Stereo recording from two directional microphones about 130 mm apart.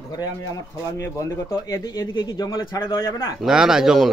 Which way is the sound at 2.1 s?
30° left (ahead or behind).